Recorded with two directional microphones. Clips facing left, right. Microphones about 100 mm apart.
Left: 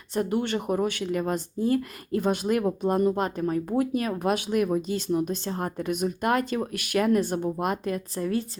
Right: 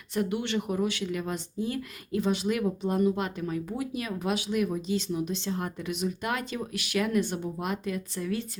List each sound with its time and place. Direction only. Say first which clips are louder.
0.1 s speech: left 3 dB; 40° left (ahead or behind)